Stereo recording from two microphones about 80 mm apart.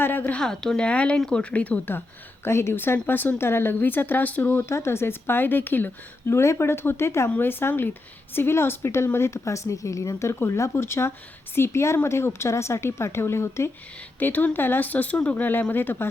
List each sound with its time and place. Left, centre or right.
0.0 s a woman's voice: left
2.4 s speech: left
4.7 s speech: left
6.2 s speech: left
14.2 s speech: left